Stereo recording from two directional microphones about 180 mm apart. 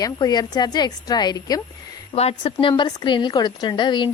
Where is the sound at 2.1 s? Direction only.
35° left (ahead or behind).